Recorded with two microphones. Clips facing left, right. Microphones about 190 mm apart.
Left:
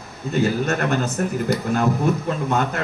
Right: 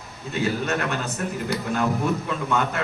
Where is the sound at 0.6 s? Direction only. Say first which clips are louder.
Left 4 dB; 40° left (ahead or behind).